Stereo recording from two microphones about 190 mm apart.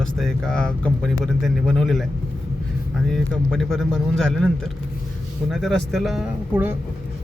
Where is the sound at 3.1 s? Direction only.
Centre (ahead or behind).